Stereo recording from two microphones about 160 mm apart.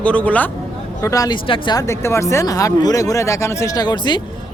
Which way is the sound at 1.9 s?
15° left (ahead or behind).